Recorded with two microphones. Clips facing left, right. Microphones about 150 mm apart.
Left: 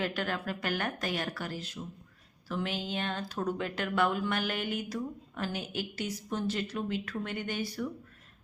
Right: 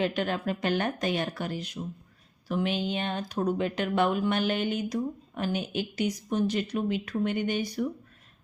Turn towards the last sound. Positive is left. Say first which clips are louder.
# right 6 dB
turn(degrees=-20)  # may be behind; listen again after turning